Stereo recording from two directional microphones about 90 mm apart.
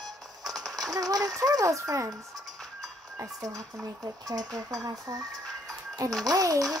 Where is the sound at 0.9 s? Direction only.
45° right (ahead or behind).